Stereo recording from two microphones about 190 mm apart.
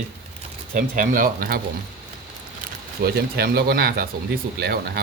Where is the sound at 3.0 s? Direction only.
55° right (ahead or behind).